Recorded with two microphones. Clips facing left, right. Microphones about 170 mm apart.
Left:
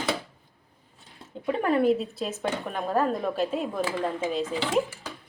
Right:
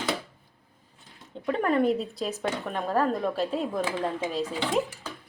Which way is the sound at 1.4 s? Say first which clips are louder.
Left 1 dB; 5° left (ahead or behind).